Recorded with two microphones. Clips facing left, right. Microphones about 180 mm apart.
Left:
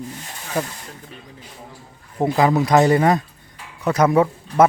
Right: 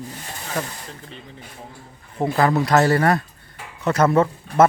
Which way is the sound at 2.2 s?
15° left (ahead or behind).